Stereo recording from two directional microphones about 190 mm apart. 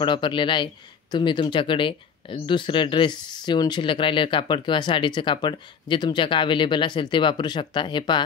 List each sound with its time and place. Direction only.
0.0 s speech: 25° left (ahead or behind)